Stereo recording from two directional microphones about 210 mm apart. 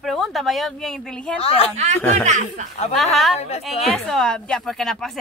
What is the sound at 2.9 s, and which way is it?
Speech, centre (ahead or behind).